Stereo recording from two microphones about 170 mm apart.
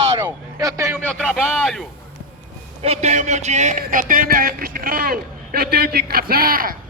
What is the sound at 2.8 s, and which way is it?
A man's voice, 40° right (ahead or behind).